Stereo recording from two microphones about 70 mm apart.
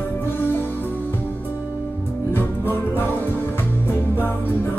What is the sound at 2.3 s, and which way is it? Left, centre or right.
Music, left.